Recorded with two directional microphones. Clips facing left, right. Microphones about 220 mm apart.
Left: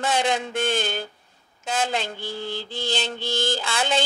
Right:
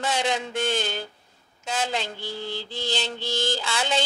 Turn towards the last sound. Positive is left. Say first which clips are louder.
# left 2 dB
turn(degrees=55)  # may be behind; listen again after turning